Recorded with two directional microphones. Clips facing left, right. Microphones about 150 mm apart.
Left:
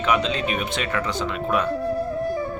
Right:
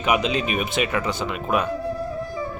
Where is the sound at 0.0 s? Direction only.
15° right (ahead or behind).